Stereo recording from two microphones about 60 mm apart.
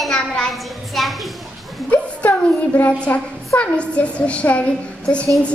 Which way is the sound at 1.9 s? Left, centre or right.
Left.